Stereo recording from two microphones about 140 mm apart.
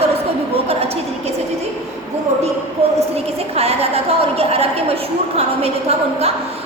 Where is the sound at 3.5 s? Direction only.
50° right (ahead or behind).